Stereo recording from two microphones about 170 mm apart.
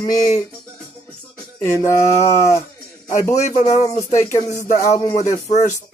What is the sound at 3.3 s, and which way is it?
Speech, 45° left (ahead or behind).